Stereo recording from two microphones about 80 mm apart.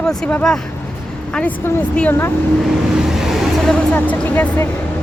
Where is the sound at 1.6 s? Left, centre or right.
Left.